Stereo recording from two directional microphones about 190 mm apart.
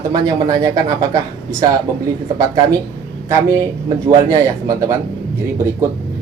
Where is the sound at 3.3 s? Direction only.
20° right (ahead or behind).